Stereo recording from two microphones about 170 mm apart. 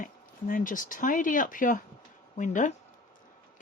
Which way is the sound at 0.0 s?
55° left (ahead or behind).